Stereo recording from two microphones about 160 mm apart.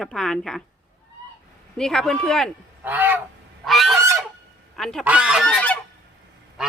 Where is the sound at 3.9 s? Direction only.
20° right (ahead or behind).